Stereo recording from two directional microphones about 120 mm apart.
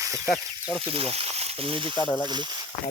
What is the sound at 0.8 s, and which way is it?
Speech, 50° right (ahead or behind).